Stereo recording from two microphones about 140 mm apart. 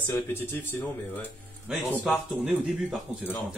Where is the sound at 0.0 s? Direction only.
15° left (ahead or behind).